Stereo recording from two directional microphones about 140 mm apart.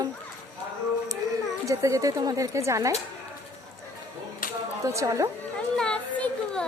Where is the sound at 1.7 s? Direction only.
20° right (ahead or behind).